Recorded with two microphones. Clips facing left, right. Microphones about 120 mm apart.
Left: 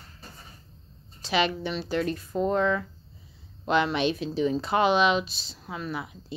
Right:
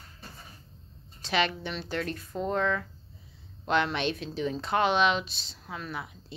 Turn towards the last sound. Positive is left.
turn(degrees=5)  # may be behind; listen again after turning